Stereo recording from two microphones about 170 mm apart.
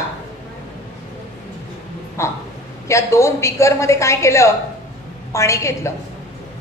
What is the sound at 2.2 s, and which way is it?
A woman's voice, 15° left (ahead or behind).